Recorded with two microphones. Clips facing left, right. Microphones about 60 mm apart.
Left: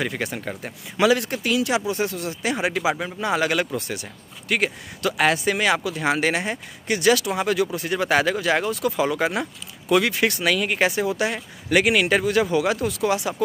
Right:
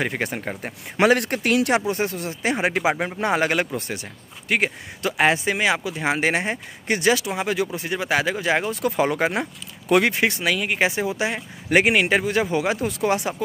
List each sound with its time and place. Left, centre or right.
0.0 s speech: right
0.9 s speech: right
1.9 s speech: right
8.8 s speech: right
10.4 s speech: centre; by 13.3 s right